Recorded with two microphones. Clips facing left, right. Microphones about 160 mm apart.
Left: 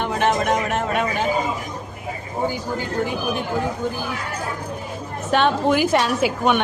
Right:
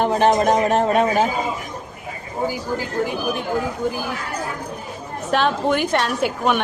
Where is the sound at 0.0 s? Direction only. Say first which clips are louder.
Right 4 dB; 35° right (ahead or behind).